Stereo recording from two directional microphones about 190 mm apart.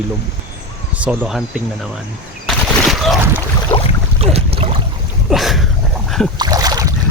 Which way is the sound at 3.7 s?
10° left (ahead or behind).